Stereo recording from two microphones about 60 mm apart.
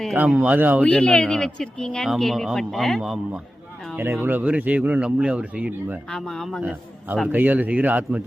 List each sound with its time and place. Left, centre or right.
0.3 s a man's voice: right
0.9 s speech: centre
4.0 s a man's voice: right
6.1 s speech: centre
6.6 s a man's voice: right